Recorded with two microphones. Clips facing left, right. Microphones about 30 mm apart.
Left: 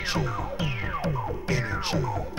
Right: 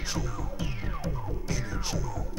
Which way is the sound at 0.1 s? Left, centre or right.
Left.